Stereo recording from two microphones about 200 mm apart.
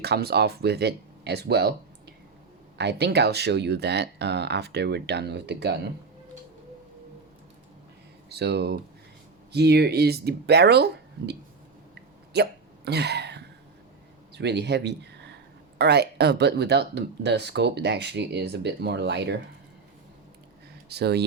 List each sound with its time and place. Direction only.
0.0 s speech: 55° right (ahead or behind)
8.3 s speech: 55° right (ahead or behind)
12.3 s hiccup: 55° right (ahead or behind)
14.3 s speech: 55° right (ahead or behind)
20.9 s speech: 55° right (ahead or behind)